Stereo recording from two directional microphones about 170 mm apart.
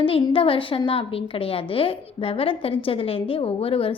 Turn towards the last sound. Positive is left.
turn(degrees=35)  # may be behind; listen again after turning